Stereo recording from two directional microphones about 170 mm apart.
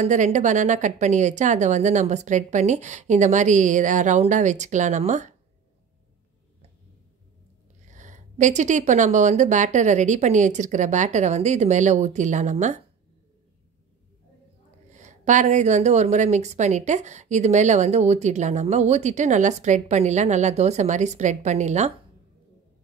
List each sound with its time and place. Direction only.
0.0 s a woman's voice: 45° right (ahead or behind)
7.9 s a woman's voice: 45° right (ahead or behind)
14.9 s a woman's voice: 45° right (ahead or behind)